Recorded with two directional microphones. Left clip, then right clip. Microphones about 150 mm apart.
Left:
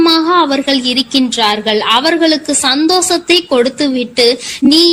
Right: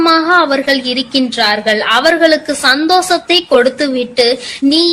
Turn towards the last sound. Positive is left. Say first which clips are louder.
# left 2 dB
turn(degrees=35)  # may be behind; listen again after turning